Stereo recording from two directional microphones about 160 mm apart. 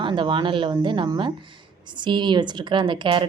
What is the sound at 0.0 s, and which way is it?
A woman's voice, 30° right (ahead or behind).